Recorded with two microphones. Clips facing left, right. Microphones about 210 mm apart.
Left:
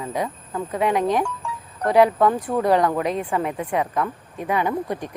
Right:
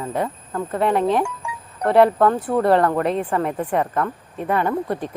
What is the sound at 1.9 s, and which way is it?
Speech, 5° left (ahead or behind).